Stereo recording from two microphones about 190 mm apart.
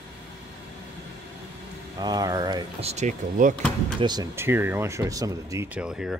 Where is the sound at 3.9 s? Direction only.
25° right (ahead or behind).